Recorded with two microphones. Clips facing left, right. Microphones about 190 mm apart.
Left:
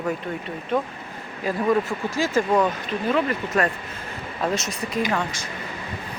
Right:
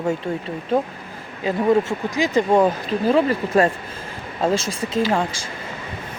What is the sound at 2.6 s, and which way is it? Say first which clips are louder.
Speech: right 5 dB; 35° right (ahead or behind).